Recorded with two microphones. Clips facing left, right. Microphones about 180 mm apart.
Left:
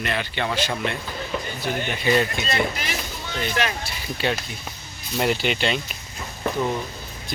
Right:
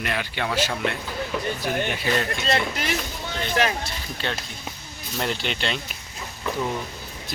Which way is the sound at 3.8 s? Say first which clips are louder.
Left 3 dB; 10° left (ahead or behind).